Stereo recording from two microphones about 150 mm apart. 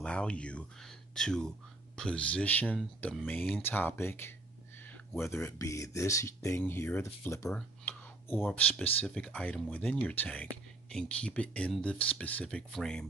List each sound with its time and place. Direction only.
0.0 s speech: 5° left (ahead or behind)
7.4 s a sound: 10° left (ahead or behind)
8.6 s speech: 5° left (ahead or behind)